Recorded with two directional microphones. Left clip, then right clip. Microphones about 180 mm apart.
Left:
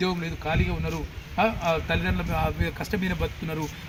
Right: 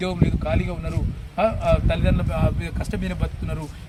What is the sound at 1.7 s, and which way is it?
Speech, 30° right (ahead or behind).